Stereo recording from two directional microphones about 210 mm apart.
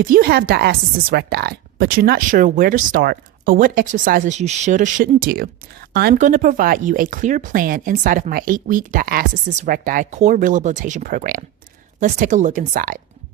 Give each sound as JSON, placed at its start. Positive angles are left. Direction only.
{"t": 0.0, "sound": "a woman's voice", "side_deg": -45}